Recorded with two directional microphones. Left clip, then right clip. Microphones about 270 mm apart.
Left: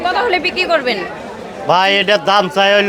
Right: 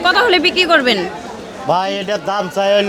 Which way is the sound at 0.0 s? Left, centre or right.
Right.